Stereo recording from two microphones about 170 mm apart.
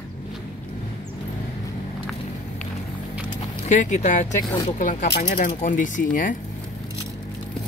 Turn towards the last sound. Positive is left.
turn(degrees=50)  # may be behind; listen again after turning